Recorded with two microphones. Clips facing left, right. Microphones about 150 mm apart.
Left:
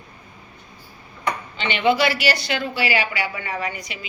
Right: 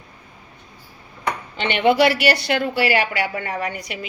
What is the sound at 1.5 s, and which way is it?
A woman's voice, 55° right (ahead or behind).